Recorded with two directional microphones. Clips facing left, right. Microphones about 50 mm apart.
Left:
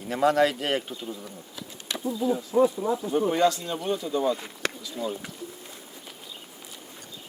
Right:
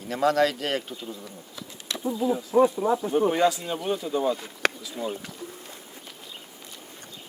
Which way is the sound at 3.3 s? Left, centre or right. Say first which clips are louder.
Even; centre.